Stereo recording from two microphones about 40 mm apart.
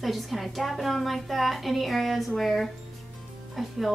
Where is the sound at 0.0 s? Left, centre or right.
Centre.